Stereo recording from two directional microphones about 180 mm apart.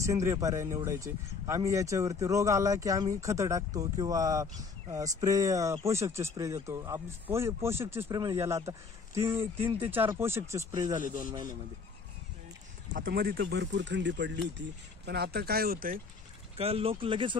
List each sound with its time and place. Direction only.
0.0 s speech: 15° right (ahead or behind)
12.9 s speech: 55° right (ahead or behind); by 14.4 s 80° right
15.0 s speech: 65° right (ahead or behind)
16.5 s speech: 35° right (ahead or behind)